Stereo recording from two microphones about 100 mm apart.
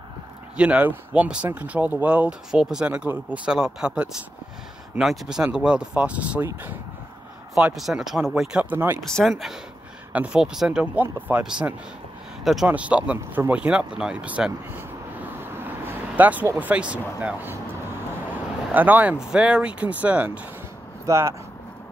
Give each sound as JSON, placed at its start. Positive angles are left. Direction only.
{"t": 0.6, "sound": "speech", "side_deg": -15}
{"t": 7.5, "sound": "speech", "side_deg": 0}
{"t": 8.7, "sound": "speech", "side_deg": -20}
{"t": 9.0, "sound": "speech", "side_deg": 5}
{"t": 12.6, "sound": "speech", "side_deg": -15}
{"t": 15.5, "sound": "vehicle", "side_deg": -20}
{"t": 16.5, "sound": "speech", "side_deg": -15}
{"t": 21.0, "sound": "speech", "side_deg": -30}